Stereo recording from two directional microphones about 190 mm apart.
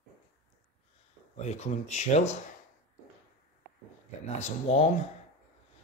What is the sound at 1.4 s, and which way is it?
Speech, 35° left (ahead or behind).